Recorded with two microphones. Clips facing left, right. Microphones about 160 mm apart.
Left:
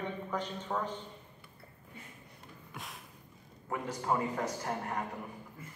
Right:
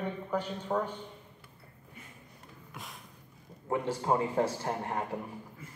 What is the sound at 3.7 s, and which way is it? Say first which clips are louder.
A man's voice: right 4 dB; 30° right (ahead or behind).